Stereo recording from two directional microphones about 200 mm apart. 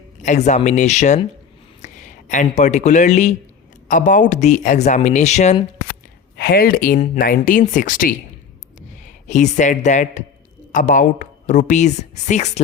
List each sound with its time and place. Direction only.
0.2 s speech: 35° left (ahead or behind)
6.3 s speech: 50° left (ahead or behind); by 12.5 s 35° left (ahead or behind)